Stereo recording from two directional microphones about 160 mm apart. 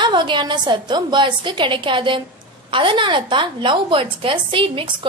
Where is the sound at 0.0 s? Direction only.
30° right (ahead or behind).